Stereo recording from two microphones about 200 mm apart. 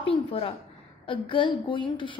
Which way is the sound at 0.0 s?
25° left (ahead or behind).